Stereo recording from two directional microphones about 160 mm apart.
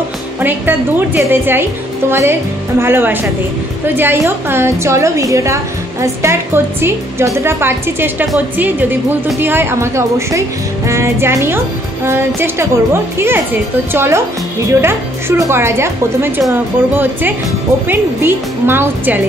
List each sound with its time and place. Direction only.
0.4 s a woman's voice: 10° right (ahead or behind)